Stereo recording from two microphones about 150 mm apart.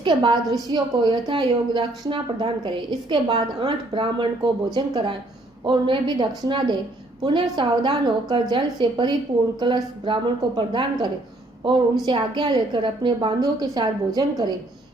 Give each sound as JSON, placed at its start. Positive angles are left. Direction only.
{"t": 0.0, "sound": "a woman's voice", "side_deg": -30}